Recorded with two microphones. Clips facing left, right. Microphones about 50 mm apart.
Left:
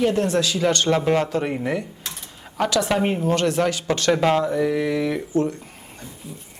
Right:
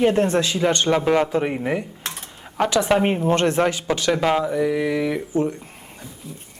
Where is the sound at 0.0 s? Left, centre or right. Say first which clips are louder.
Right 2 dB; right.